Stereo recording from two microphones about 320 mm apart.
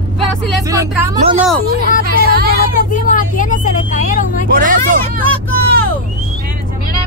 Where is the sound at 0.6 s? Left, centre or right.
Centre.